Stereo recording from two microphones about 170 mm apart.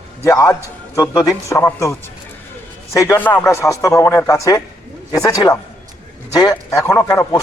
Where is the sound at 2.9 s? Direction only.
20° left (ahead or behind).